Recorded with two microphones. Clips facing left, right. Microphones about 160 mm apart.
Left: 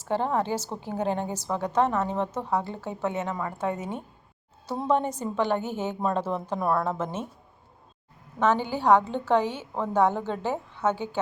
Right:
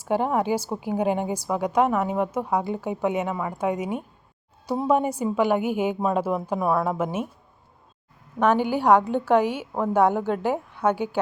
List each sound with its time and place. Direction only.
0.0 s a woman's voice: 10° right (ahead or behind)
8.4 s a woman's voice: 15° right (ahead or behind)